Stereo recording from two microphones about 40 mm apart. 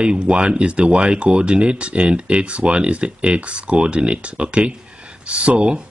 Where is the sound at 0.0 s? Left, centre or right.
Right.